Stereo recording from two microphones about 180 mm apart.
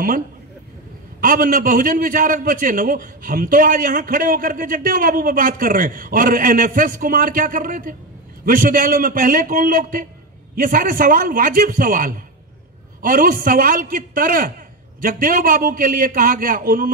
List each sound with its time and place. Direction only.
1.2 s a man's voice: 50° right (ahead or behind)